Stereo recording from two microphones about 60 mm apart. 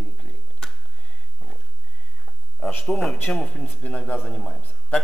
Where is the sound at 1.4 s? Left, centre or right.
Centre.